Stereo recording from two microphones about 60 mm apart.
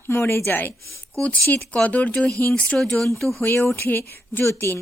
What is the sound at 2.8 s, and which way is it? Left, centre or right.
Speech, centre.